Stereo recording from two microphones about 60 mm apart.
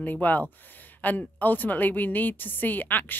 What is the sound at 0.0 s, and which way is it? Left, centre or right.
A woman's voice, left.